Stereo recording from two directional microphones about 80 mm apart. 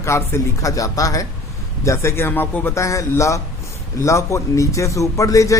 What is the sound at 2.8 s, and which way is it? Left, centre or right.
Speech, left.